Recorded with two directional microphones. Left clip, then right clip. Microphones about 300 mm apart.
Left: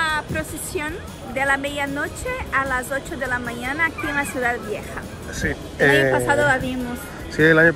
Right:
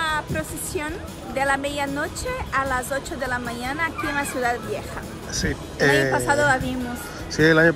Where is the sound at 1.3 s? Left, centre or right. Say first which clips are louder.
Left 1 dB; centre.